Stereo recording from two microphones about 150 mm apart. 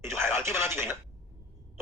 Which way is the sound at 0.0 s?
15° right (ahead or behind).